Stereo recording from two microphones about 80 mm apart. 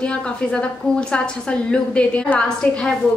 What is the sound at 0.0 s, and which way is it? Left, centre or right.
Speech, centre.